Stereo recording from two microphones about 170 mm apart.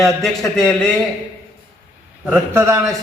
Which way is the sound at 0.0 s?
5° left (ahead or behind).